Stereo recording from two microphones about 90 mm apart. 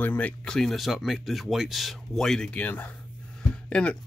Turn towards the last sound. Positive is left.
turn(degrees=10)  # may be behind; listen again after turning